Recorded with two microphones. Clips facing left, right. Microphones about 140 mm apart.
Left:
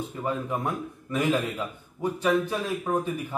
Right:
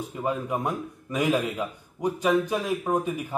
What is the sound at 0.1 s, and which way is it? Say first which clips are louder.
Speech: right 4 dB; 15° right (ahead or behind).